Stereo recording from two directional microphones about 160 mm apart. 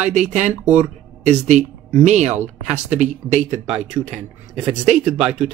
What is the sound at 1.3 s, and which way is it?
Speech, 45° right (ahead or behind).